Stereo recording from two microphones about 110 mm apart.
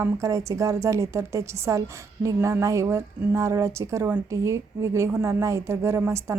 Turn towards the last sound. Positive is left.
turn(degrees=-25)  # may be behind; listen again after turning